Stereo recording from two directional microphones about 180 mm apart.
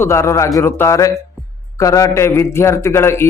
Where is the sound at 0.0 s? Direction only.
15° left (ahead or behind).